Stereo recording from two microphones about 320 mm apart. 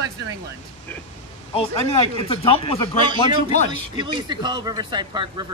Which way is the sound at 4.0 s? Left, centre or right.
Centre.